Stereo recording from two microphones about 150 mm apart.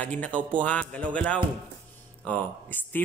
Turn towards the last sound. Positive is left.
turn(degrees=10)  # may be behind; listen again after turning